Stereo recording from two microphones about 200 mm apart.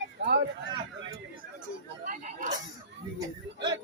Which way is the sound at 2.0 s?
40° right (ahead or behind).